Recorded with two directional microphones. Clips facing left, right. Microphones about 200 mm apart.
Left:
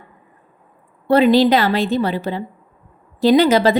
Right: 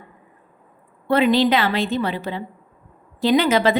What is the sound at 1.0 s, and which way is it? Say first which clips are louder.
A woman's voice: left 4 dB; 35° left (ahead or behind).